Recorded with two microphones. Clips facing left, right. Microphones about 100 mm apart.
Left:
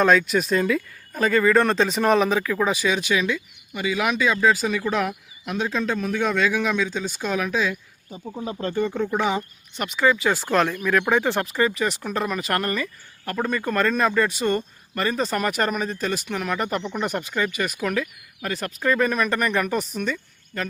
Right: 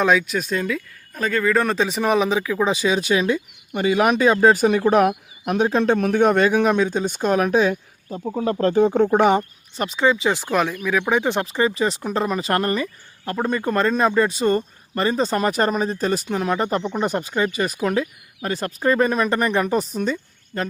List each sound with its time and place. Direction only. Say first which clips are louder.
0.0 s speech: even; 10° right (ahead or behind)
0.3 s speech: left 2 dB; centre (ahead or behind)
2.7 s speech: right 3 dB; 30° right (ahead or behind)
3.7 s speech: right 6 dB; 50° right (ahead or behind)
8.4 s speech: right 8 dB; 70° right (ahead or behind)
9.0 s speech: right 7 dB; 55° right (ahead or behind)
9.4 s speech: right 4 dB; 30° right (ahead or behind)
10.5 s speech: left 2 dB; 10° right (ahead or behind)
11.1 s speech: right 1 dB; 15° right (ahead or behind)
11.4 s speech: right 2 dB; 30° right (ahead or behind)